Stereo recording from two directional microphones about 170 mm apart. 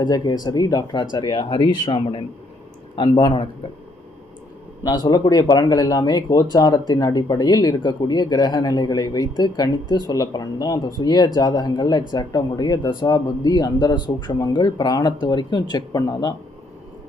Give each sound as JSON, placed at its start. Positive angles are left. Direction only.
{"t": 0.0, "sound": "speech", "side_deg": 25}
{"t": 4.9, "sound": "speech", "side_deg": 20}